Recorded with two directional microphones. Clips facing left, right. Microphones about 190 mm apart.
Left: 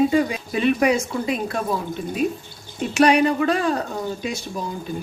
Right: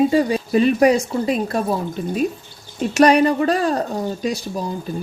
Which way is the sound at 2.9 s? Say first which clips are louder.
Right 3 dB; 40° right (ahead or behind).